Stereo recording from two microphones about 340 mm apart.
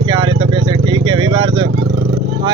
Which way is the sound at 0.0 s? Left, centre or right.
Centre.